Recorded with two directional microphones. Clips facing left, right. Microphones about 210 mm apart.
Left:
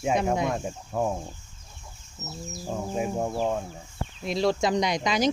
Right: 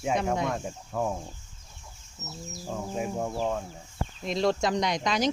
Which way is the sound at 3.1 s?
30° left (ahead or behind).